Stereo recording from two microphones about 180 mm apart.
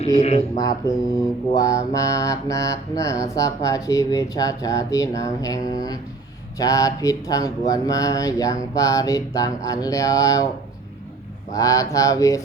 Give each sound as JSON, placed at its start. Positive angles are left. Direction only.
{"t": 0.2, "sound": "speech", "side_deg": 35}
{"t": 0.5, "sound": "speech", "side_deg": 20}
{"t": 1.5, "sound": "mantra", "side_deg": 20}
{"t": 1.9, "sound": "speech", "side_deg": 20}
{"t": 11.5, "sound": "speech", "side_deg": 20}